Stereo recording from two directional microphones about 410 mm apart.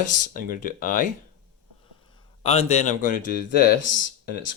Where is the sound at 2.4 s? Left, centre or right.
Centre.